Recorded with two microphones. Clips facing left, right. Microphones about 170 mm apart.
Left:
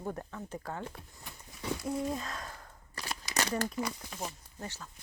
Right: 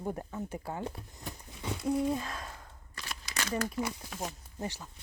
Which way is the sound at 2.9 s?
40° left (ahead or behind).